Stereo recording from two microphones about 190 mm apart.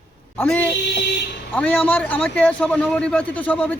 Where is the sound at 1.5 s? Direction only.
5° left (ahead or behind).